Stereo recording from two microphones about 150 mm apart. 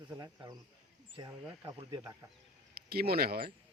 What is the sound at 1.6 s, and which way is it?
Speech, 25° right (ahead or behind).